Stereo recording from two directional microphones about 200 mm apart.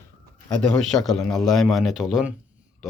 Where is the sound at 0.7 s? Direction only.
Centre (ahead or behind).